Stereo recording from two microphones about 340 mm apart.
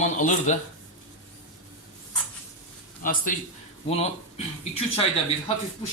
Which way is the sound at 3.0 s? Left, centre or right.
Left.